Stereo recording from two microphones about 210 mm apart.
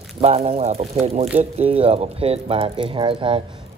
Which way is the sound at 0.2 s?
30° right (ahead or behind).